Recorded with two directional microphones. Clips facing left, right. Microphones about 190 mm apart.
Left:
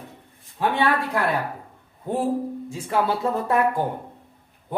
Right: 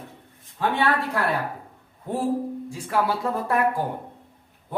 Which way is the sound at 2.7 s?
25° left (ahead or behind).